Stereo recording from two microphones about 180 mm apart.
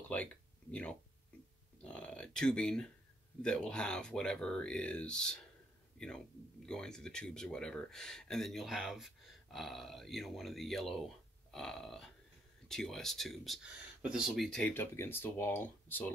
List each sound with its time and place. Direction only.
0.1 s speech: 5° left (ahead or behind)
1.9 s a sound: 5° left (ahead or behind)
3.4 s speech: 5° left (ahead or behind)